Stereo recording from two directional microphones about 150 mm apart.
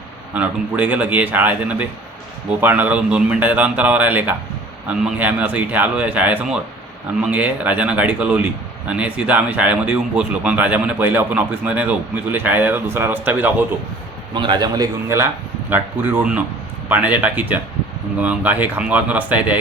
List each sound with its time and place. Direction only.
0.3 s speech: 10° right (ahead or behind)
14.3 s a man's voice: 30° right (ahead or behind)
15.7 s speech: 10° right (ahead or behind)